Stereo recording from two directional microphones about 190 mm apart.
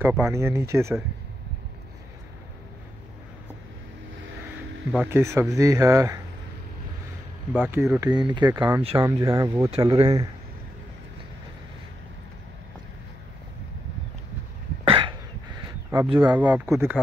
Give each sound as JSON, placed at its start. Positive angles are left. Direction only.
{"t": 0.0, "sound": "speech", "side_deg": -10}
{"t": 4.9, "sound": "speech", "side_deg": -10}
{"t": 7.5, "sound": "speech", "side_deg": -10}
{"t": 8.5, "sound": "speech", "side_deg": -10}
{"t": 14.9, "sound": "a sound", "side_deg": -25}
{"t": 16.2, "sound": "speech", "side_deg": -10}